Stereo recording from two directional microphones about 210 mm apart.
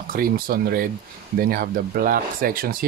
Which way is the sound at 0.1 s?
45° right (ahead or behind).